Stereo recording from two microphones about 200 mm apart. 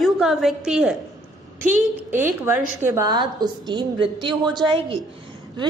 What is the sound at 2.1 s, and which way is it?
A woman's voice, 10° right (ahead or behind).